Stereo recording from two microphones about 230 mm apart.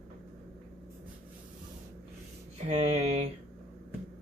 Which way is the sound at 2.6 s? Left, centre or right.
Right.